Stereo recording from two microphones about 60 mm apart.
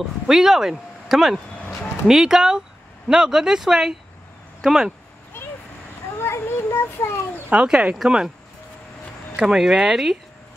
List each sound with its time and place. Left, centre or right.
0.3 s speech: centre
6.1 s children playing: left
7.5 s speech: centre
9.4 s speech: centre